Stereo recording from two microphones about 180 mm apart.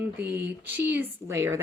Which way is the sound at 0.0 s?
10° right (ahead or behind).